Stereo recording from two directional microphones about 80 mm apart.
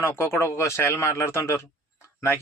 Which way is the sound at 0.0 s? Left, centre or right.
Left.